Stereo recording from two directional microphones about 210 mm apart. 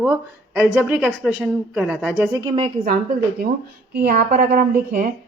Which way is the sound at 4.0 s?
40° right (ahead or behind).